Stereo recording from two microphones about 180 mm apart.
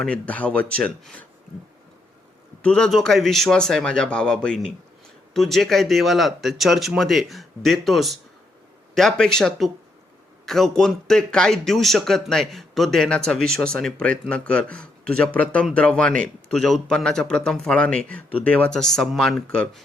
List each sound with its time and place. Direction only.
0.0 s speech: 5° left (ahead or behind)
2.6 s a man's voice: 5° left (ahead or behind)